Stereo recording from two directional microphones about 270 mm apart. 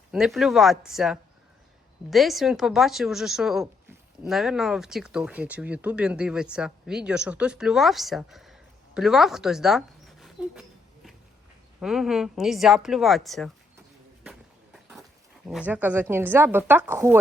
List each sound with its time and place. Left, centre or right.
0.1 s speech: centre
11.8 s speech: centre
14.3 s a sound: centre
15.4 s a woman's voice: centre